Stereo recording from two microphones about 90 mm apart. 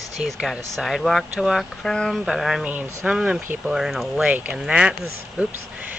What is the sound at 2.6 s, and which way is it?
Speech, 15° right (ahead or behind).